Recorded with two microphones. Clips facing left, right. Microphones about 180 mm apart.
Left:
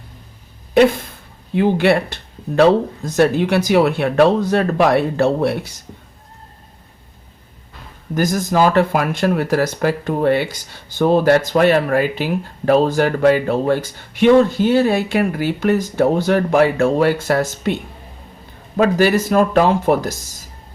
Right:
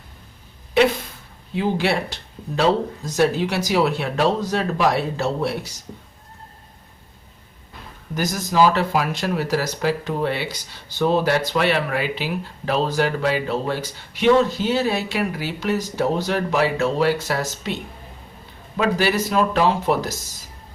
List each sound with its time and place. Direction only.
0.7 s speech: 50° left (ahead or behind)
8.1 s speech: 50° left (ahead or behind)
18.8 s speech: 45° left (ahead or behind)